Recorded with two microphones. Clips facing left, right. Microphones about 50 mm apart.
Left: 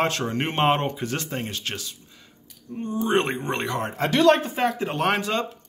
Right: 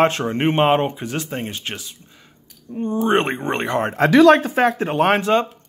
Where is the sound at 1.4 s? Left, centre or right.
Right.